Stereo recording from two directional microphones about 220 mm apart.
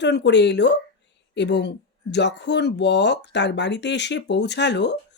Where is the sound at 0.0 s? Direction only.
50° left (ahead or behind).